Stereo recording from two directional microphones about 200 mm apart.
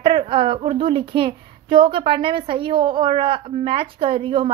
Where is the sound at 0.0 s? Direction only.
25° right (ahead or behind).